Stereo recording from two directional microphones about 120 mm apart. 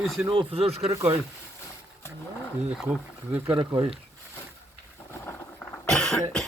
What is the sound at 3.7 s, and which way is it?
Speech, 50° right (ahead or behind).